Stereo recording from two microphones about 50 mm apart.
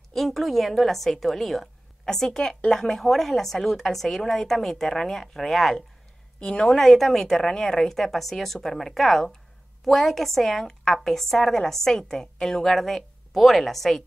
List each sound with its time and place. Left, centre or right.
0.1 s a woman's voice: centre
6.4 s a woman's voice: centre
6.8 s a woman's voice: centre